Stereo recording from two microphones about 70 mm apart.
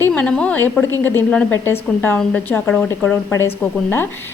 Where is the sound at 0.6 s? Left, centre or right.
Left.